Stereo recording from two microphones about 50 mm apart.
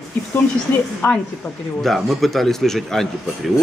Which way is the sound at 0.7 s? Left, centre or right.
Left.